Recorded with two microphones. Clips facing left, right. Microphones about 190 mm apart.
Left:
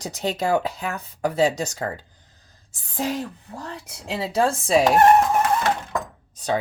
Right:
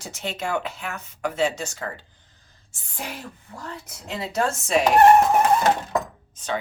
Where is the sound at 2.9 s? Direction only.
40° left (ahead or behind).